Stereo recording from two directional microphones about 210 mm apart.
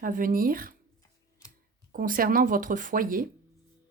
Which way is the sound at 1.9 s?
40° right (ahead or behind).